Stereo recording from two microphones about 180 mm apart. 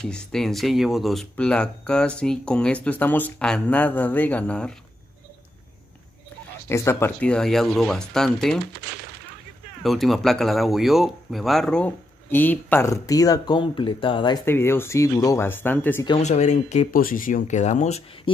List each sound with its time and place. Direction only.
0.0 s speech: 5° left (ahead or behind)
6.7 s speech: 15° left (ahead or behind)
9.8 s speech: centre (ahead or behind); by 14.4 s 25° left (ahead or behind)
14.4 s speech: 15° left (ahead or behind)
16.2 s speech: 40° left (ahead or behind)